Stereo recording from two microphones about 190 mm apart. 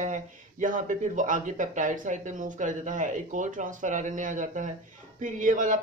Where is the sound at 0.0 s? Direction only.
40° right (ahead or behind).